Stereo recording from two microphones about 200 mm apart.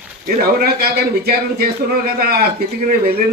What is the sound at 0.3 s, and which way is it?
A man's voice, 50° right (ahead or behind).